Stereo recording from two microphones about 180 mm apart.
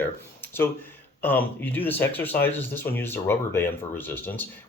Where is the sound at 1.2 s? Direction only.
10° left (ahead or behind).